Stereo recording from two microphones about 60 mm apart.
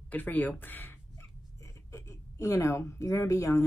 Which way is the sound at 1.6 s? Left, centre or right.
Left.